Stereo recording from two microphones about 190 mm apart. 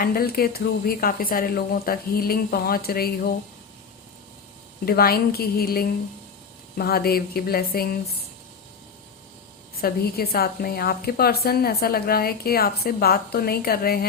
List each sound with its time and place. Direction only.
0.0 s a woman's voice: 50° left (ahead or behind)
4.9 s a woman's voice: 50° left (ahead or behind)
9.8 s a woman's voice: 50° left (ahead or behind)